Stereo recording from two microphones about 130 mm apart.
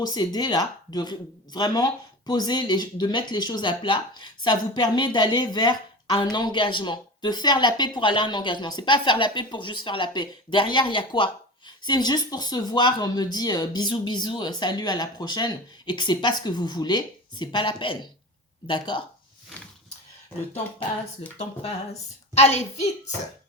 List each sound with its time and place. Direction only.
0.0 s speech: 30° left (ahead or behind)
22.4 s a child's voice: 55° left (ahead or behind)